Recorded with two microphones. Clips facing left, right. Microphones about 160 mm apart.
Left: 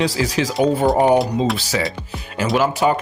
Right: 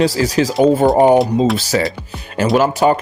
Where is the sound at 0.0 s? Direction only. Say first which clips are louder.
Right 5 dB; 40° right (ahead or behind).